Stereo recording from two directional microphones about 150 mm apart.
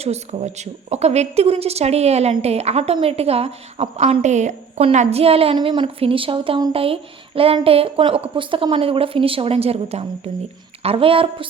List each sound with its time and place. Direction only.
0.0 s speech: 45° right (ahead or behind)